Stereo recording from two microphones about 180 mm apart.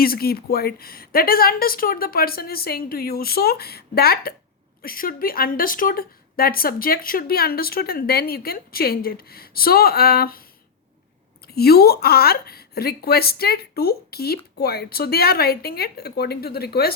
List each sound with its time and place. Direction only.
0.0 s speech: 55° left (ahead or behind)
11.4 s speech: 60° left (ahead or behind)